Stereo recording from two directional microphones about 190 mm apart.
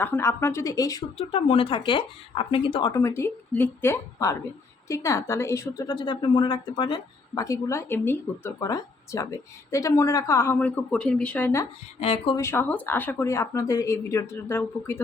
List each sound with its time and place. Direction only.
0.0 s a woman's voice: 10° left (ahead or behind)
1.3 s a woman's voice: 30° left (ahead or behind); by 11.7 s 15° left (ahead or behind)
11.9 s speech: 30° left (ahead or behind)
12.4 s a woman's voice: 10° left (ahead or behind)